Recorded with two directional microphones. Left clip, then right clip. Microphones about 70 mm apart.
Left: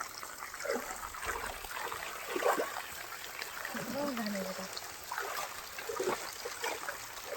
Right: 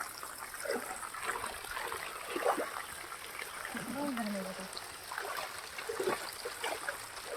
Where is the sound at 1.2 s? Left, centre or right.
Left.